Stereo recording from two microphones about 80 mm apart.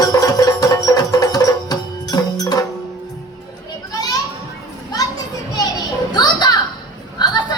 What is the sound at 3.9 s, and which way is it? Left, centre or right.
Children playing, left.